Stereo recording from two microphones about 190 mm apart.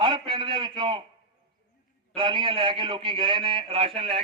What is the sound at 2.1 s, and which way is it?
A man's voice, 25° right (ahead or behind).